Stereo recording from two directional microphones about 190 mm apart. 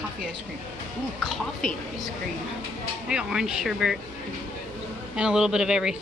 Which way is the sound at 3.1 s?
5° right (ahead or behind).